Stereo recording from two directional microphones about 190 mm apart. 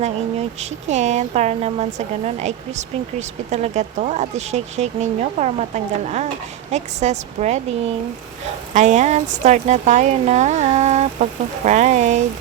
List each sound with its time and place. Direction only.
0.0 s speech: 35° right (ahead or behind)